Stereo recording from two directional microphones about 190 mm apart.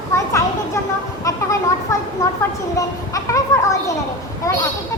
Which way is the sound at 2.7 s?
15° left (ahead or behind).